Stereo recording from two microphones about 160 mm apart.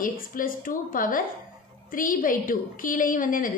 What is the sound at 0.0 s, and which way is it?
A woman's voice, 60° left (ahead or behind).